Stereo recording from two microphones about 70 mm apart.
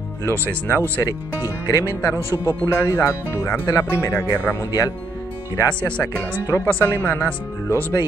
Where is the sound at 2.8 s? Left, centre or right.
Left.